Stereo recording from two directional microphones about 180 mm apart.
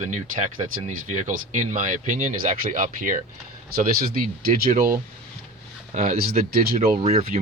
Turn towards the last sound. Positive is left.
turn(degrees=-35)  # may be behind; listen again after turning